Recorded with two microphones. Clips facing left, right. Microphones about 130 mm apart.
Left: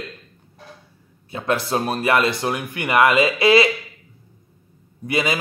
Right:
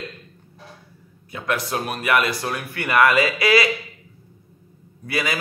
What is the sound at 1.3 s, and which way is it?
Speech, 30° left (ahead or behind).